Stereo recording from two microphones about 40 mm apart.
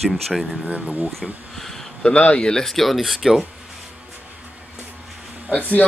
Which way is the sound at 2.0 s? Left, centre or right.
Left.